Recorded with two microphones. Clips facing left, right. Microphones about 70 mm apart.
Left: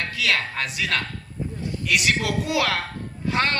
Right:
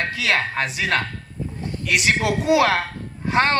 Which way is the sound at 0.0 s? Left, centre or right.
Right.